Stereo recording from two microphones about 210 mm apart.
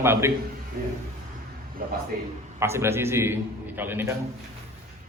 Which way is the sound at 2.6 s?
10° right (ahead or behind).